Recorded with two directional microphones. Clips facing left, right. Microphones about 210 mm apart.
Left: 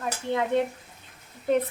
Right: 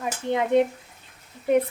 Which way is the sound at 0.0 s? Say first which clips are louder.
Right 2 dB; 15° right (ahead or behind).